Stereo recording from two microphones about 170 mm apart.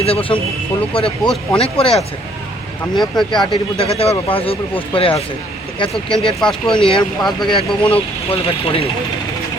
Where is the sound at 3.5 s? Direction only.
35° left (ahead or behind).